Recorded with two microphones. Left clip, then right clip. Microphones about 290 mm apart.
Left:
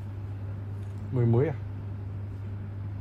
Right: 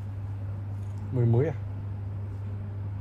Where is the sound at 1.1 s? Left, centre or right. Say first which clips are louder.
Left 1 dB; centre.